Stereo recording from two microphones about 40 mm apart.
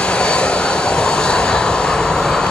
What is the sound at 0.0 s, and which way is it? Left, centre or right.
Vehicle, left.